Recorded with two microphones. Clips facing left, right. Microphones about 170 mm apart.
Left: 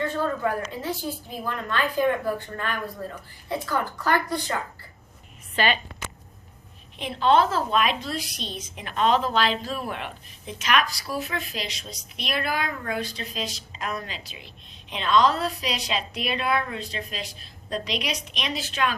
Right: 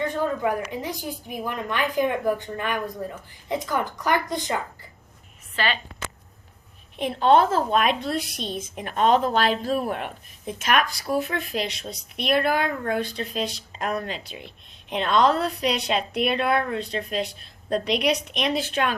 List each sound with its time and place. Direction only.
0.0 s a woman's voice: 15° right (ahead or behind)
5.5 s a woman's voice: 15° left (ahead or behind)
6.9 s a woman's voice: 50° right (ahead or behind)